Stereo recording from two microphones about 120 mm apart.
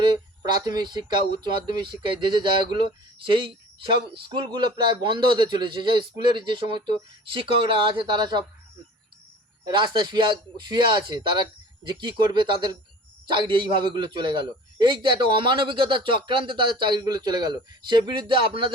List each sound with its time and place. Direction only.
0.0 s a man's voice: 40° right (ahead or behind)
9.6 s a man's voice: 40° right (ahead or behind)